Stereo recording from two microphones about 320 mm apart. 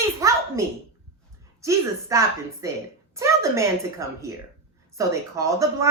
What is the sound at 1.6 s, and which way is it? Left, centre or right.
Speech, centre.